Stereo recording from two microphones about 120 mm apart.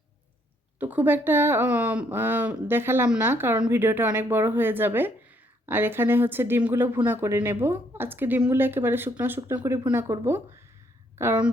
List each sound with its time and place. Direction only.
0.8 s speech: 15° right (ahead or behind)